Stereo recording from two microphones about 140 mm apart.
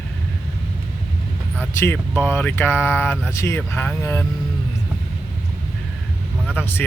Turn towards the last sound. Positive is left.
turn(degrees=15)  # may be behind; listen again after turning